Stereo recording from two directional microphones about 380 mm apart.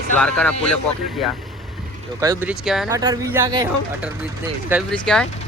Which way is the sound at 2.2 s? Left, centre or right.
Centre.